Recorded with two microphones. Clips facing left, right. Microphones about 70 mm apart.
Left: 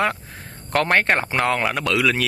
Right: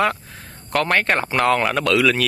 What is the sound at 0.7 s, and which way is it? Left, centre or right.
Speech, left.